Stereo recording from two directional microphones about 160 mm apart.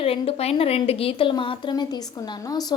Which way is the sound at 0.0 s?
35° left (ahead or behind).